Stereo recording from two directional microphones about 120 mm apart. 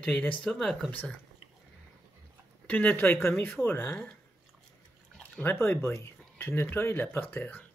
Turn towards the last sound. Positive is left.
turn(degrees=15)  # may be behind; listen again after turning